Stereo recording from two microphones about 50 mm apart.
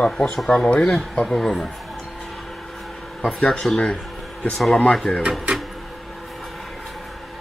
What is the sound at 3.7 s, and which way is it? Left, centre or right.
Speech, left.